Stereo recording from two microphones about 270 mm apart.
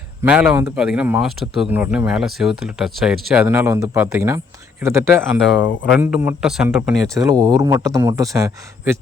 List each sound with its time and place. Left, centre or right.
0.2 s speech: centre
5.4 s speech: left
5.9 s speech: centre
7.2 s speech: centre